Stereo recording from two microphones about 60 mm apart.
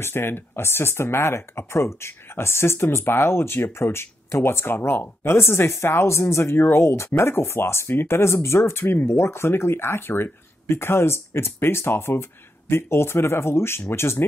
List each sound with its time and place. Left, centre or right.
0.0 s speech: left